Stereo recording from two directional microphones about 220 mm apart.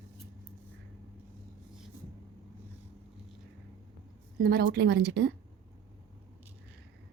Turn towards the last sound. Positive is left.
turn(degrees=-50)  # may be behind; listen again after turning